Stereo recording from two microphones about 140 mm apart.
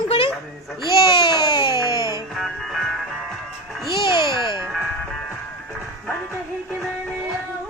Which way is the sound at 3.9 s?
35° left (ahead or behind).